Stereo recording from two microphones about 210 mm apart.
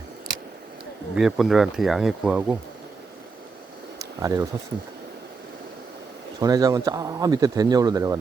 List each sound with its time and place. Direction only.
1.1 s speech: centre (ahead or behind)
3.9 s a sound: 15° right (ahead or behind)
6.4 s speech: 15° right (ahead or behind)